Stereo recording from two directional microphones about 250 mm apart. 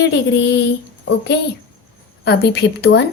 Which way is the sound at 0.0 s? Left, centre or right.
Left.